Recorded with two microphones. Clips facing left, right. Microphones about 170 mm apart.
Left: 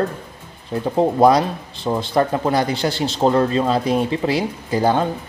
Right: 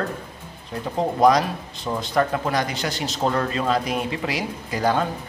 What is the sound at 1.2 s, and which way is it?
Speech, 30° left (ahead or behind).